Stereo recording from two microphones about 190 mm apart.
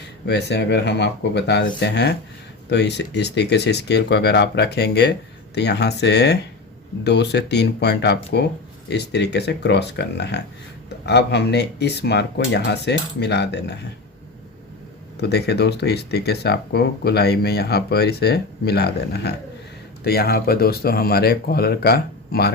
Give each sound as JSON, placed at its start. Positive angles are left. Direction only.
{"t": 0.3, "sound": "speech", "side_deg": 60}
{"t": 15.2, "sound": "speech", "side_deg": 60}